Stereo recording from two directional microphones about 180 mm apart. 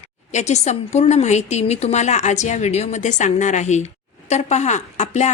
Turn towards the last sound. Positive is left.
turn(degrees=40)  # may be behind; listen again after turning